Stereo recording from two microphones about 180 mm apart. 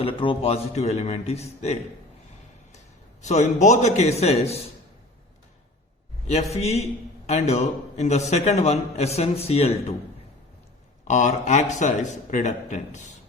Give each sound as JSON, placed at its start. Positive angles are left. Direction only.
{"t": 0.0, "sound": "a man's voice", "side_deg": 30}
{"t": 3.2, "sound": "a man's voice", "side_deg": 40}
{"t": 6.5, "sound": "a man's voice", "side_deg": 35}
{"t": 11.0, "sound": "a man's voice", "side_deg": 40}